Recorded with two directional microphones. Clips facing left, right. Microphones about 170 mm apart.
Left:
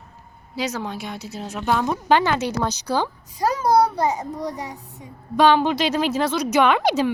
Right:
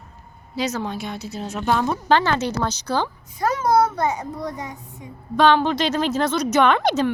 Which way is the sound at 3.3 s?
35° left (ahead or behind).